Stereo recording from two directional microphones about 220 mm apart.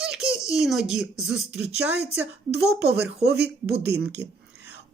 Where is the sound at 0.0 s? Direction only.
Centre (ahead or behind).